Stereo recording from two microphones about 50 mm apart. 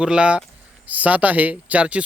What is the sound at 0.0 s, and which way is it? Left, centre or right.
Speech, right.